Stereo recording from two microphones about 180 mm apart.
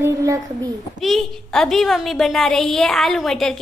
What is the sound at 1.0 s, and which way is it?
A woman's voice, centre (ahead or behind).